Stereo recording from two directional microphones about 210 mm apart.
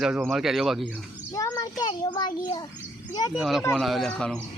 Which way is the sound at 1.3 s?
15° left (ahead or behind).